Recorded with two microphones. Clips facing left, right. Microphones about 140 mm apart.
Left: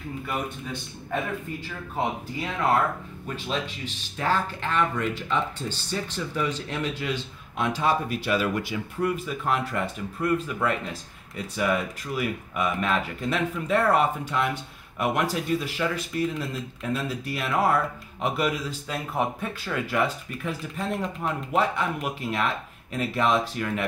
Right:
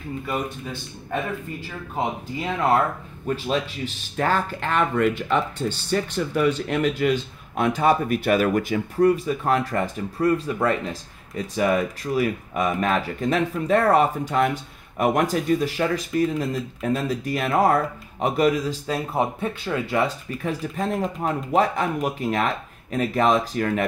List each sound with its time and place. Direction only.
3.4 s speech: 50° right (ahead or behind); by 20.0 s 25° right (ahead or behind)
20.4 s speech: 40° right (ahead or behind)